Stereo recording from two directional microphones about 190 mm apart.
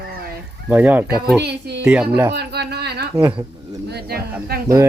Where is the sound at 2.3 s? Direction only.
60° right (ahead or behind).